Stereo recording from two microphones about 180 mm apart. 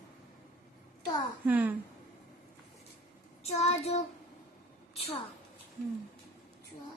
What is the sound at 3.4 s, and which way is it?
Child singing, 35° left (ahead or behind).